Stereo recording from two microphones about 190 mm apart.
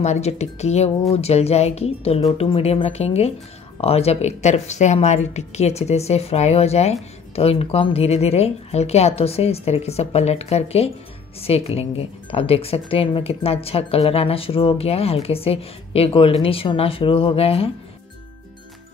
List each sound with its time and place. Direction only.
0.0 s speech: 35° left (ahead or behind)